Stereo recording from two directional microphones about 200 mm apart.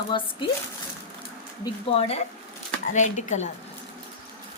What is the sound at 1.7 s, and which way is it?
A woman's voice, 30° left (ahead or behind).